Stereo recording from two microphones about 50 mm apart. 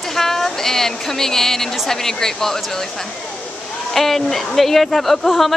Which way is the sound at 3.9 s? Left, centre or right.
Centre.